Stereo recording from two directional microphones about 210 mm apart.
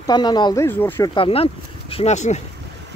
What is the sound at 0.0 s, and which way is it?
Speech, 20° left (ahead or behind).